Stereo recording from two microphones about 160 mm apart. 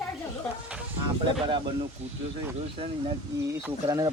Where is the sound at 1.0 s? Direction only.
30° right (ahead or behind).